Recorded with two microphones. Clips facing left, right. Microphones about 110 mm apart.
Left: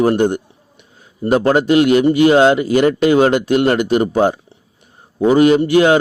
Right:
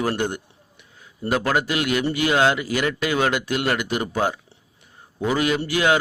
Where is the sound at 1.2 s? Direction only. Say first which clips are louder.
Left 9 dB; 30° left (ahead or behind).